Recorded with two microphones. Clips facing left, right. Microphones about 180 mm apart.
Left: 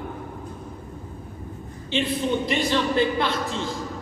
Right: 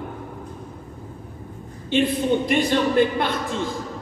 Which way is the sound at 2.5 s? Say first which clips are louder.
Right 3 dB; 50° right (ahead or behind).